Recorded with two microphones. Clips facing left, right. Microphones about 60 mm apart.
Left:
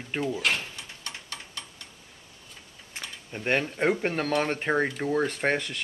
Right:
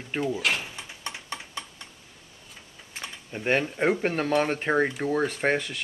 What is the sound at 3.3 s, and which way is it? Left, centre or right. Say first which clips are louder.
Speech: right 2 dB; centre.